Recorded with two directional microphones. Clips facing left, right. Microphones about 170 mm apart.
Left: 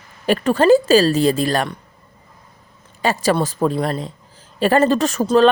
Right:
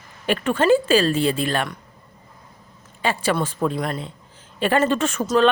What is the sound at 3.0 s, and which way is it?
Speech, 40° left (ahead or behind).